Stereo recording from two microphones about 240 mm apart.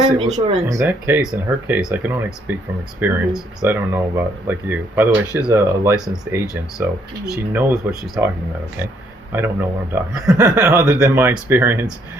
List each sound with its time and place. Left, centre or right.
0.0 s speech: right
0.7 s a man's voice: centre
9.3 s a man's voice: centre